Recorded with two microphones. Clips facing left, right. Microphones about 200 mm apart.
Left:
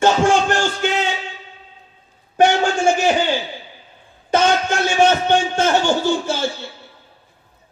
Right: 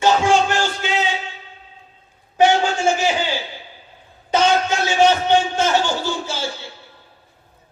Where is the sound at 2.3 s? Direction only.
50° left (ahead or behind).